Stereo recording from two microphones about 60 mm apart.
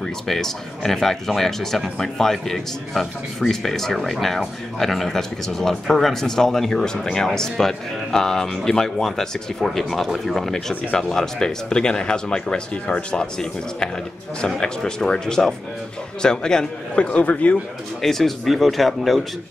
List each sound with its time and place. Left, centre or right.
0.3 s speech: centre
17.0 s a man's voice: left
18.0 s speech: centre